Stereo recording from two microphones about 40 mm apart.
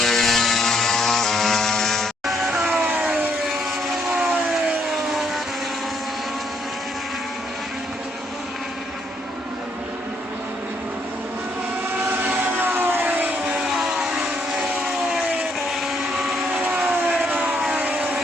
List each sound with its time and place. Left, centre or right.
0.0 s vehicle: centre
3.1 s a sound: centre
4.1 s vehicle: centre
11.9 s vehicle: right
13.1 s vehicle: right
13.7 s vehicle: centre
16.6 s vehicle: right
16.9 s a sound: centre